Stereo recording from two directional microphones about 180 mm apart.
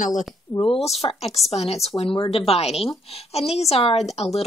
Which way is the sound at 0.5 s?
25° left (ahead or behind).